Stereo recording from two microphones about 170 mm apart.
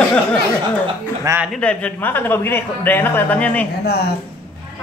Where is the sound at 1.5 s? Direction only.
5° left (ahead or behind).